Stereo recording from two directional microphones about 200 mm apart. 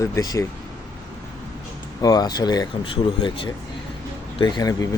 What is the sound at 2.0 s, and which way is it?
Speech, 20° left (ahead or behind).